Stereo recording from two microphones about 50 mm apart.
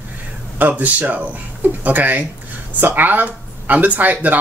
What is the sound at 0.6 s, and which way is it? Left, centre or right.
Speech, right.